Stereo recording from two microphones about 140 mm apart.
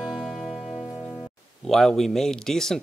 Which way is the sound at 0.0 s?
Centre (ahead or behind).